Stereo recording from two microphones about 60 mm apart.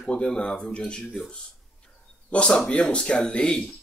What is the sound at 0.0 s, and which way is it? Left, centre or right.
Speech, centre.